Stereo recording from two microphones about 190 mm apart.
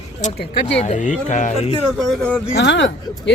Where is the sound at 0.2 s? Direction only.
40° left (ahead or behind).